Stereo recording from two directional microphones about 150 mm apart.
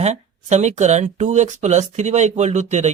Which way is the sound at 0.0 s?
50° right (ahead or behind).